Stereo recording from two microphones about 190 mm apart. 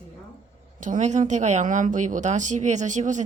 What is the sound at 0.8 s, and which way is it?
Speech, 40° right (ahead or behind).